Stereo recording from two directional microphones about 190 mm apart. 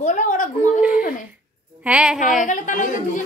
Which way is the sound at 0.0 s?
45° left (ahead or behind).